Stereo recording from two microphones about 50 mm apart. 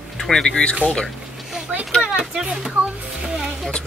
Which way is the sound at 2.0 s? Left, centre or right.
Centre.